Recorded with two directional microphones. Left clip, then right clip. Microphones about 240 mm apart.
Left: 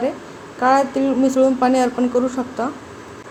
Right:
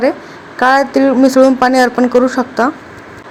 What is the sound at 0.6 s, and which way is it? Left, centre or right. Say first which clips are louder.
Speech: right 6 dB; right.